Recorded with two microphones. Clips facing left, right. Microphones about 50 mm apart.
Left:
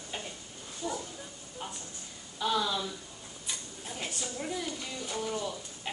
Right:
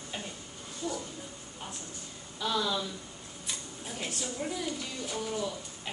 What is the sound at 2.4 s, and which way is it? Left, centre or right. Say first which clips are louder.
Speech: left 1 dB; centre.